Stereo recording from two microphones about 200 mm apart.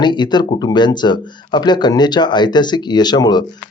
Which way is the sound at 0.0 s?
20° left (ahead or behind).